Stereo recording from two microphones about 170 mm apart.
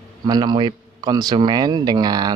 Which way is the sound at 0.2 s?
25° right (ahead or behind).